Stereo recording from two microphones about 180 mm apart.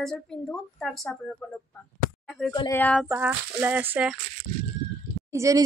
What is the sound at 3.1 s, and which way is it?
Speech, 10° right (ahead or behind).